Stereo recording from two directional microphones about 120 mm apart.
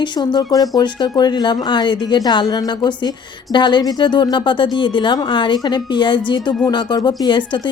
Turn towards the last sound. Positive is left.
turn(degrees=40)  # may be behind; listen again after turning